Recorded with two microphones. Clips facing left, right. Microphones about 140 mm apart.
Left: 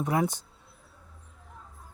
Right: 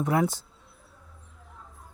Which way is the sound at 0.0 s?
20° left (ahead or behind).